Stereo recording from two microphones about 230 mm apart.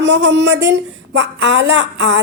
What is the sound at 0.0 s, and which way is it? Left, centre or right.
A woman's voice, right.